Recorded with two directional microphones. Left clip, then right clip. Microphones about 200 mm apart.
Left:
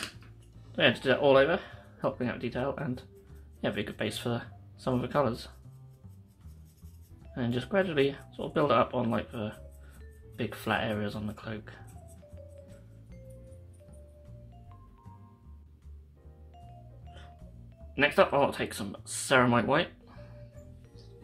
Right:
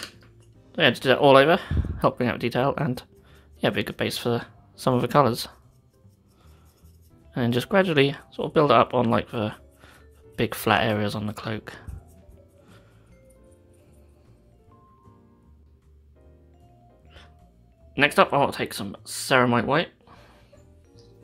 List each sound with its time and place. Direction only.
0.7 s speech: 30° right (ahead or behind)
7.3 s speech: 40° right (ahead or behind)
17.9 s speech: 35° right (ahead or behind)